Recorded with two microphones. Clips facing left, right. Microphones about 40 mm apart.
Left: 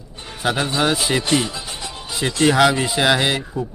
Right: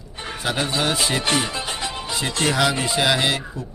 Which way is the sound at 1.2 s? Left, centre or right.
Right.